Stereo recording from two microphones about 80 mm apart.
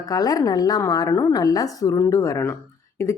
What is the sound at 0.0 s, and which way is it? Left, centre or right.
A woman's voice, left.